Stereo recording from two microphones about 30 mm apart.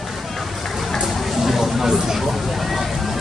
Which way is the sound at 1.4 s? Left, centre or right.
Centre.